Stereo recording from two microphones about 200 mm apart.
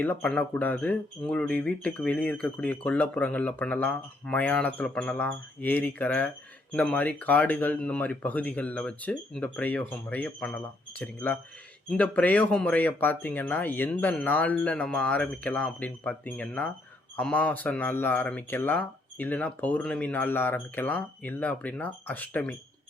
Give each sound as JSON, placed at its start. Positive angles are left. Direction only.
{"t": 0.0, "sound": "speech", "side_deg": 5}